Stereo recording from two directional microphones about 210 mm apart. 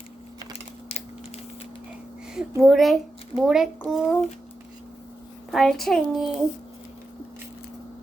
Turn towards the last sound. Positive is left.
turn(degrees=0)  # may be behind; listen again after turning